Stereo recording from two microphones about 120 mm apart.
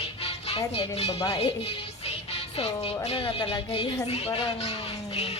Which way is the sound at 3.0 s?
50° left (ahead or behind).